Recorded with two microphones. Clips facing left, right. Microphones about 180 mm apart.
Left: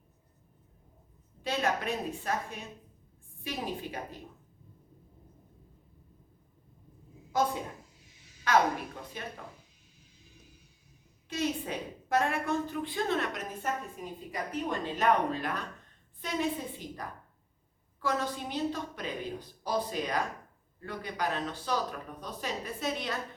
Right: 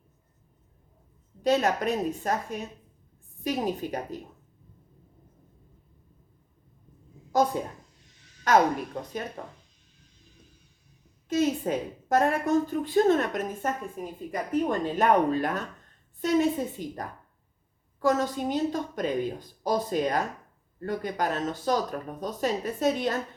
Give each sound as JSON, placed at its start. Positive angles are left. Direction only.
{"t": 1.4, "sound": "a woman's voice", "side_deg": -45}
{"t": 9.4, "sound": "speech", "side_deg": -40}
{"t": 11.3, "sound": "a woman's voice", "side_deg": -45}